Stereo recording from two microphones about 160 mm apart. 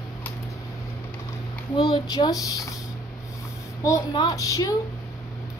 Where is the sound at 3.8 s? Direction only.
20° left (ahead or behind).